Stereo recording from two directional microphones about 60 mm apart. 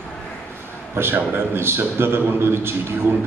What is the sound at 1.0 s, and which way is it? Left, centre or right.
A man's voice, right.